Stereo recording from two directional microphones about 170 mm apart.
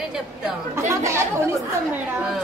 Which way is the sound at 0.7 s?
15° right (ahead or behind).